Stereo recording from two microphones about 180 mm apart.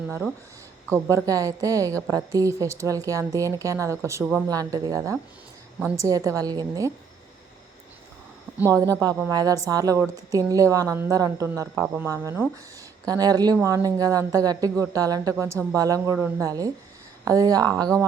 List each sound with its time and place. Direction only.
0.9 s speech: 15° right (ahead or behind)
4.2 s speech: 5° right (ahead or behind)
4.4 s speech: 20° right (ahead or behind)
8.6 s speech: 20° right (ahead or behind)